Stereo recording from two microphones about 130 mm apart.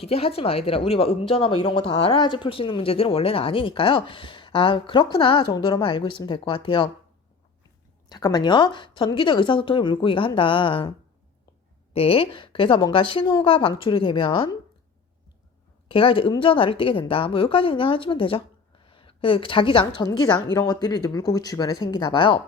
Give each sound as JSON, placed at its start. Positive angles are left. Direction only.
{"t": 0.0, "sound": "speech", "side_deg": 50}
{"t": 8.1, "sound": "speech", "side_deg": 35}
{"t": 11.9, "sound": "speech", "side_deg": 45}
{"t": 15.9, "sound": "speech", "side_deg": 45}